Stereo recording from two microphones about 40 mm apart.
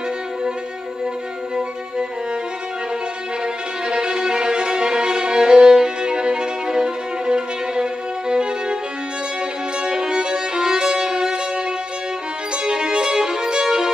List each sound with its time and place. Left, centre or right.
3.9 s violin: centre
9.8 s violin: centre
12.6 s violin: right